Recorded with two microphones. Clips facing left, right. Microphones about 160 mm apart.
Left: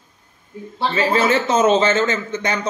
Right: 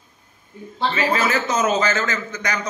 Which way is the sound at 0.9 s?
30° left (ahead or behind).